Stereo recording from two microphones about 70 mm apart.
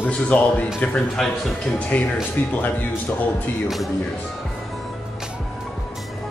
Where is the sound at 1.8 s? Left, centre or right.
Left.